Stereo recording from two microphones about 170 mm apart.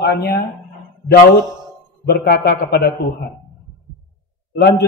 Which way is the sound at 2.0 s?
70° left (ahead or behind).